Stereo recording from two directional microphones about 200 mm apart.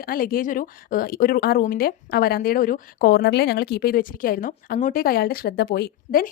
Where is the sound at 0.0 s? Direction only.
45° left (ahead or behind).